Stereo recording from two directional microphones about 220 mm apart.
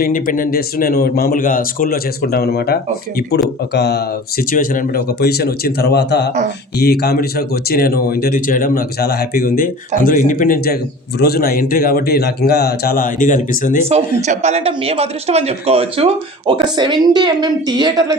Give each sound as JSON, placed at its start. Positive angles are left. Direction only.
{"t": 0.0, "sound": "a man's voice", "side_deg": 40}
{"t": 14.2, "sound": "a man's voice", "side_deg": -30}